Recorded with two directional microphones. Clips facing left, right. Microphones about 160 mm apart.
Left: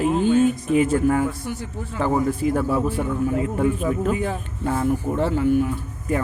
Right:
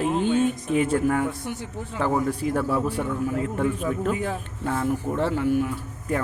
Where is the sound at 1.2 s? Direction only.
20° right (ahead or behind).